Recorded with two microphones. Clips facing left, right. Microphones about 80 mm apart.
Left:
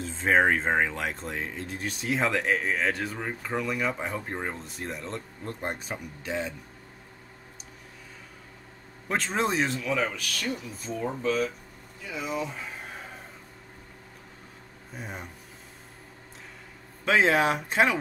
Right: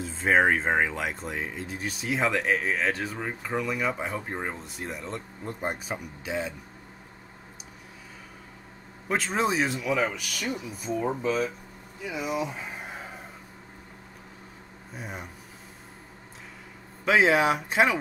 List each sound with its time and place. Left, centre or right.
0.0 s speech: centre
9.1 s speech: centre
12.0 s a sound: centre
15.0 s speech: centre
17.0 s speech: centre